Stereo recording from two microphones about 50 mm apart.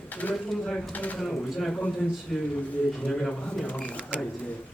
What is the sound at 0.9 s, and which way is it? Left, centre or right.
Speech, left.